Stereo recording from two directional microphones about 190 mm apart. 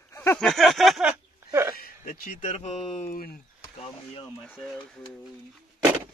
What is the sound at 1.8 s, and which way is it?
Speech, 45° left (ahead or behind).